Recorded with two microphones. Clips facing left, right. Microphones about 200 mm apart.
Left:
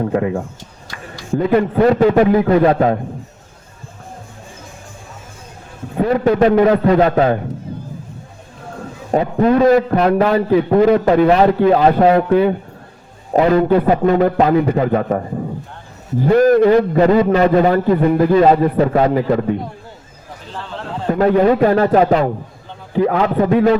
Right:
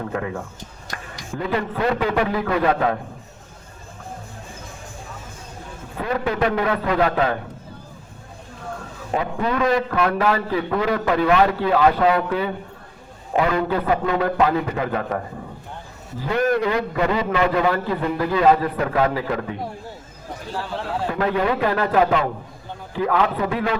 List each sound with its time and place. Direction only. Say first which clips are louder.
0.0 s a man's voice: left 9 dB; 35° left (ahead or behind)
1.4 s a man's voice: left 10 dB; 50° left (ahead or behind)
1.7 s a man's voice: left 9 dB; 35° left (ahead or behind)
2.3 s a man's voice: left 8 dB; 30° left (ahead or behind)
6.0 s a man's voice: left 9 dB; 35° left (ahead or behind)
9.1 s a man's voice: left 9 dB; 40° left (ahead or behind)
10.2 s a man's voice: left 7 dB; 50° left (ahead or behind); by 12.1 s 35° left (ahead or behind)
12.1 s a man's voice: left 9 dB; 50° left (ahead or behind)
13.3 s a man's voice: left 8 dB; 35° left (ahead or behind)
16.2 s a man's voice: left 10 dB; 40° left (ahead or behind)
18.6 s a man's voice: left 7 dB; 30° left (ahead or behind)
19.1 s a man's voice: left 9 dB; 45° left (ahead or behind)
20.5 s horse: right 1 dB; 10° right (ahead or behind)
21.1 s a man's voice: left 10 dB; 40° left (ahead or behind)